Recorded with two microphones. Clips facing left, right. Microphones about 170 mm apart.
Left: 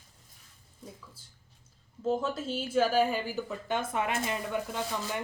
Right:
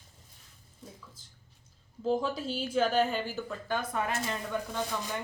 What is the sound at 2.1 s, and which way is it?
A woman's voice, centre (ahead or behind).